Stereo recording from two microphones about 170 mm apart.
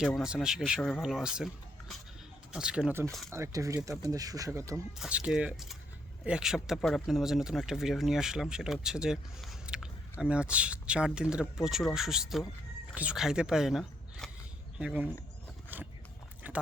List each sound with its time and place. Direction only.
0.0 s speech: 5° right (ahead or behind)
2.5 s speech: 5° right (ahead or behind)
4.9 s speech: 5° right (ahead or behind)
15.7 s a sound: 10° right (ahead or behind)